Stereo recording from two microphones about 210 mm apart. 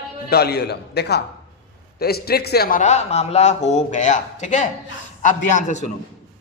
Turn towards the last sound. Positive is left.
turn(degrees=35)  # may be behind; listen again after turning